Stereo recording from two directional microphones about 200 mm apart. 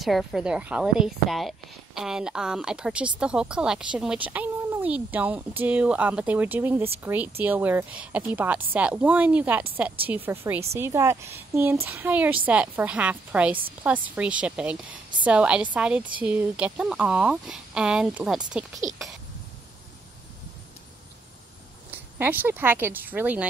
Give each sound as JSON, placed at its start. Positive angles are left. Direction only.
{"t": 0.0, "sound": "a woman's voice", "side_deg": 0}
{"t": 18.9, "sound": "speech", "side_deg": -40}
{"t": 21.9, "sound": "speech", "side_deg": -10}